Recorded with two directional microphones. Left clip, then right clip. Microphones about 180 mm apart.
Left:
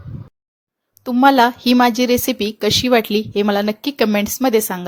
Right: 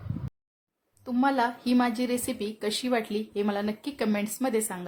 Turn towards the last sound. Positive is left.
turn(degrees=40)  # may be behind; listen again after turning